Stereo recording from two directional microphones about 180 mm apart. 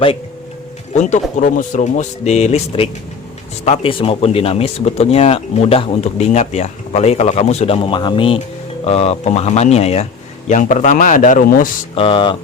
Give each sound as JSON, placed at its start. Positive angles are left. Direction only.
{"t": 0.9, "sound": "speech", "side_deg": 40}
{"t": 11.9, "sound": "speech", "side_deg": 30}